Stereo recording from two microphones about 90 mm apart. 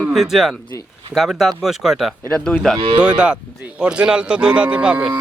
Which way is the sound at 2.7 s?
65° right (ahead or behind).